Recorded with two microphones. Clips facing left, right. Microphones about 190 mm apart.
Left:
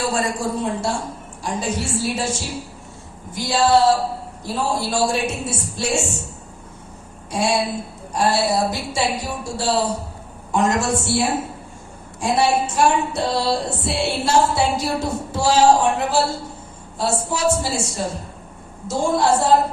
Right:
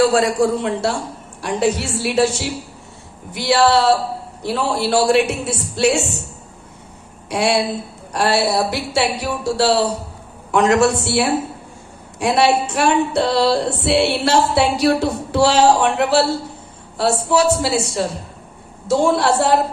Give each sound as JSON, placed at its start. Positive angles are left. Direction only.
{"t": 0.0, "sound": "music", "side_deg": -70}
{"t": 7.3, "sound": "a woman's voice", "side_deg": -70}
{"t": 8.1, "sound": "music", "side_deg": -70}